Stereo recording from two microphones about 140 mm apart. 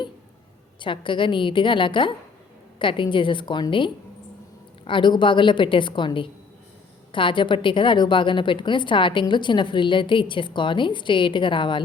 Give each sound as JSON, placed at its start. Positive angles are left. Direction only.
{"t": 0.8, "sound": "a woman's voice", "side_deg": 35}